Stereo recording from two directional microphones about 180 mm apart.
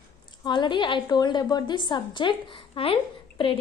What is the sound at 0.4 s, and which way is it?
A woman's voice, 25° left (ahead or behind).